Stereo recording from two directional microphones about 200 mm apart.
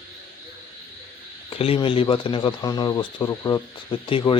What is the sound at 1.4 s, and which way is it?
Speech, 30° left (ahead or behind).